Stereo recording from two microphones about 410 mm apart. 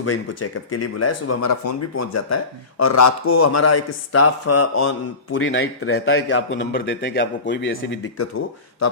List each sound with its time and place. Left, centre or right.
0.0 s speech: left